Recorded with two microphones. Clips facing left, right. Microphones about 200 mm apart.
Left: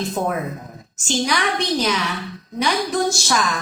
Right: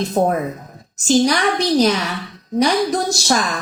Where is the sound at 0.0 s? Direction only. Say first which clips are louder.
Right 5 dB; 40° right (ahead or behind).